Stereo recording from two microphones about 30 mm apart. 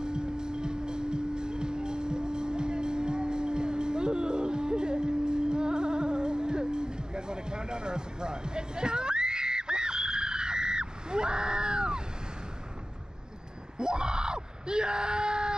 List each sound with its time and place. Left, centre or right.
0.0 s music: right
13.7 s screaming: right